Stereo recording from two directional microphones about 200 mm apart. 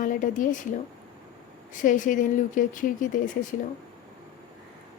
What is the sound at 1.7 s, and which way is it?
Speech, 40° left (ahead or behind).